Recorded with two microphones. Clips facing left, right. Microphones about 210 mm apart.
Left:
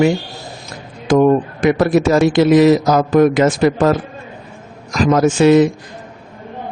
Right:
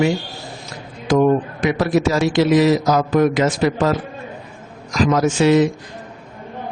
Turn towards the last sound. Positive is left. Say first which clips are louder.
# left 4 dB
turn(degrees=55)  # may be behind; listen again after turning